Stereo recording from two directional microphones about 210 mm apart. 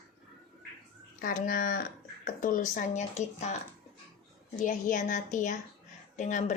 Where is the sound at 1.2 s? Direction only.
40° left (ahead or behind).